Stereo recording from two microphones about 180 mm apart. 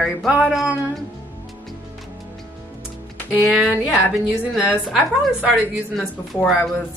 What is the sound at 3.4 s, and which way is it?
Speech, 5° right (ahead or behind).